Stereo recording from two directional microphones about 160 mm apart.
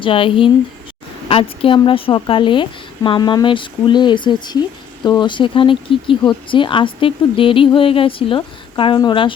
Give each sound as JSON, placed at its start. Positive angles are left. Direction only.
{"t": 0.0, "sound": "speech", "side_deg": 35}